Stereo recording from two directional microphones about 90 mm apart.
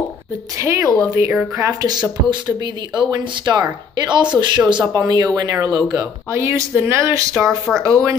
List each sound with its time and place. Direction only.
0.6 s speech: 30° right (ahead or behind)
1.6 s speech: 45° right (ahead or behind)
4.9 s speech: 45° right (ahead or behind)
7.4 s speech: centre (ahead or behind)
7.8 s speech: 35° right (ahead or behind)